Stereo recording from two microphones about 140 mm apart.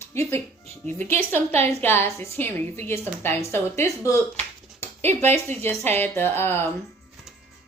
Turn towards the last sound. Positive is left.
turn(degrees=15)  # may be behind; listen again after turning